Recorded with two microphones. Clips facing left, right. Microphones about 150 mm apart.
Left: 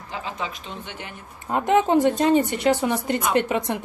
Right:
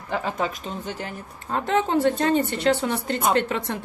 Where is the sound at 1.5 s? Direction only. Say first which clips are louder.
Left 4 dB; 15° left (ahead or behind).